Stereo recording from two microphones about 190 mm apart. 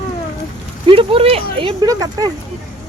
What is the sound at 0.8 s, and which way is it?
Speech, 30° right (ahead or behind).